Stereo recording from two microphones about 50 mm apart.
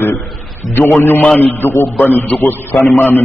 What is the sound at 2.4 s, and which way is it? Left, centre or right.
Speech, left.